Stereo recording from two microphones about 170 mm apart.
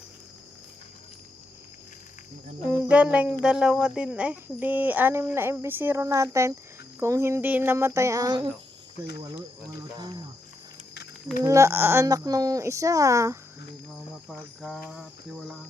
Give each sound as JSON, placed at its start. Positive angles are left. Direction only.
{"t": 2.6, "sound": "speech", "side_deg": -10}
{"t": 10.0, "sound": "speech", "side_deg": -25}
{"t": 11.4, "sound": "speech", "side_deg": -15}
{"t": 14.3, "sound": "speech", "side_deg": 0}